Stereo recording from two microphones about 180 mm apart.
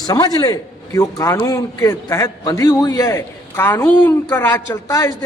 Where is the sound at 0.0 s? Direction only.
20° left (ahead or behind).